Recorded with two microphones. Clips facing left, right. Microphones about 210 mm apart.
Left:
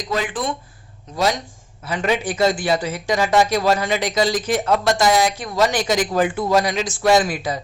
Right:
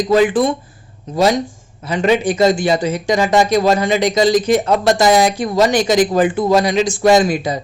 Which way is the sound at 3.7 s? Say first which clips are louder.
Right 6 dB; 5° left (ahead or behind).